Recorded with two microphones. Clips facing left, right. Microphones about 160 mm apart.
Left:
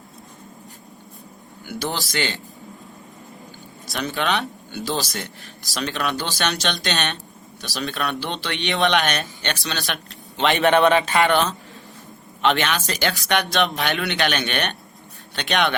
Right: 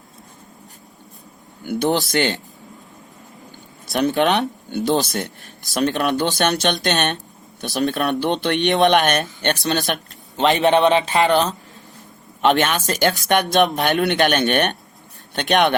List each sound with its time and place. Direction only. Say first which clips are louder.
1.6 s speech: right 8 dB; 55° right (ahead or behind)
3.9 s speech: right 7 dB; 55° right (ahead or behind); by 11.5 s 35° right (ahead or behind)
12.4 s speech: right 4 dB; 45° right (ahead or behind)